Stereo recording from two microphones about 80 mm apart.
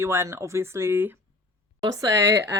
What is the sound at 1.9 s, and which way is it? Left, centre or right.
Speech, right.